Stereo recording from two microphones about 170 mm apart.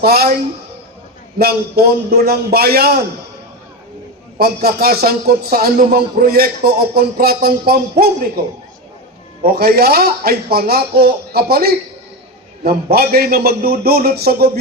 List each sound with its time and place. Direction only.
0.0 s a man's voice: 65° right (ahead or behind)
1.4 s a man's voice: 65° right (ahead or behind)
4.4 s a man's voice: 65° right (ahead or behind)
9.4 s a man's voice: 60° right (ahead or behind)